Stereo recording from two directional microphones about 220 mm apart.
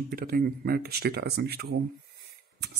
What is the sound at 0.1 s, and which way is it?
Speech, 40° right (ahead or behind).